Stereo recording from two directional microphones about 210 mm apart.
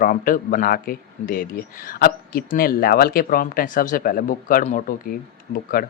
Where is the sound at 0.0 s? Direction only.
40° left (ahead or behind).